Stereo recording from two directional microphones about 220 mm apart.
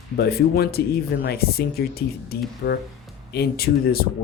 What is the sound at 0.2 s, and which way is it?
Speech, 45° left (ahead or behind).